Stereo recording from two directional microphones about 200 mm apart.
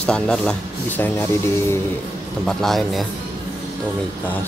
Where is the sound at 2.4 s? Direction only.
Centre (ahead or behind).